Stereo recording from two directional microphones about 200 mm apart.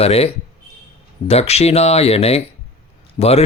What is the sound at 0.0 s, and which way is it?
Speech, 30° left (ahead or behind).